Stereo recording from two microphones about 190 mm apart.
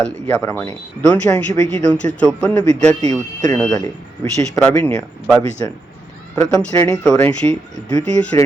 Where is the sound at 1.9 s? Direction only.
5° left (ahead or behind).